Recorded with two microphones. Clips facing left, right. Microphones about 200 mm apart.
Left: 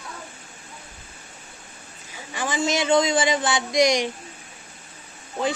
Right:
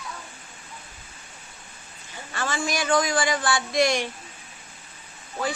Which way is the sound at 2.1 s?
15° left (ahead or behind).